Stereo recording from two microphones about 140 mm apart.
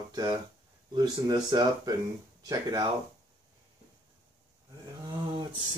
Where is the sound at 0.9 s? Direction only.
30° right (ahead or behind).